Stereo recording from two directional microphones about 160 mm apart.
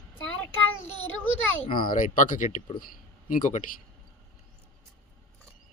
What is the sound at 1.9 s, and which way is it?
Speech, 55° left (ahead or behind).